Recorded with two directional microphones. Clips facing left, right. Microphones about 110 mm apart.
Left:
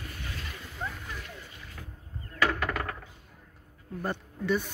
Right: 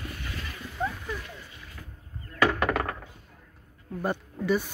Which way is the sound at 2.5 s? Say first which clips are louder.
Right 5 dB; 90° right.